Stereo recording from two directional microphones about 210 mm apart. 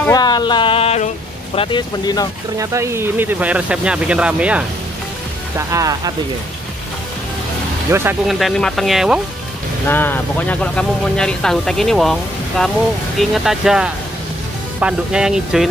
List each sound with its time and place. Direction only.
0.0 s a sound: 20° left (ahead or behind)
2.5 s speech: 15° right (ahead or behind)
5.7 s speech: 15° right (ahead or behind)
7.9 s speech: 10° right (ahead or behind)
8.3 s speech: centre (ahead or behind)
9.8 s speech: 10° left (ahead or behind)